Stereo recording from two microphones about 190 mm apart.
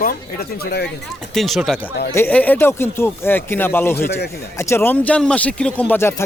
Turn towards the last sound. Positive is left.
turn(degrees=10)  # may be behind; listen again after turning